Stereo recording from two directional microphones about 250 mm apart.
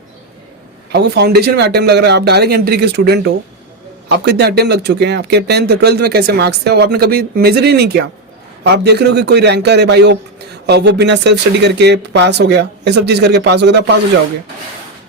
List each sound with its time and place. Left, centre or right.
0.9 s speech: right